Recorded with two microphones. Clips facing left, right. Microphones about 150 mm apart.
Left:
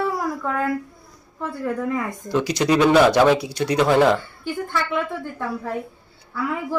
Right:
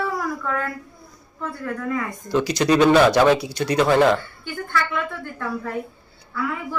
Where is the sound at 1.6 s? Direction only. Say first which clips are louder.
Left 2 dB; 15° left (ahead or behind).